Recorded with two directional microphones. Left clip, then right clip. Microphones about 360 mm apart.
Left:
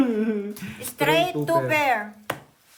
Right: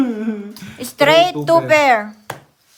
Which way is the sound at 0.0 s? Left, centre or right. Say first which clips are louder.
Right 2 dB; centre.